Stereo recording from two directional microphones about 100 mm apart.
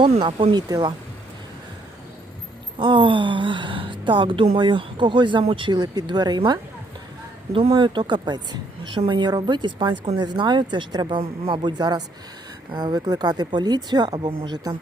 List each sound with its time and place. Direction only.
0.0 s speech: 60° right (ahead or behind)
0.5 s a woman's voice: 45° right (ahead or behind)
2.7 s a woman's voice: 55° right (ahead or behind)
7.7 s a woman's voice: 50° right (ahead or behind)